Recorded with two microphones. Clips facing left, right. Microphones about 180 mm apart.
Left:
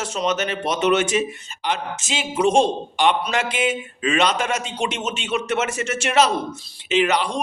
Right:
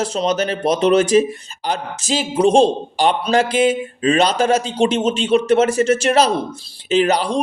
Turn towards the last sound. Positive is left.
turn(degrees=-35)  # may be behind; listen again after turning